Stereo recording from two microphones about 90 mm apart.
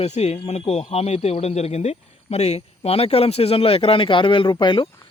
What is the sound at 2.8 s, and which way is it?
Speech, 90° left.